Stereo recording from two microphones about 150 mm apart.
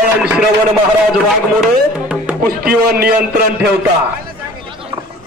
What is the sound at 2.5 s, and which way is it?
Speech, 90° right.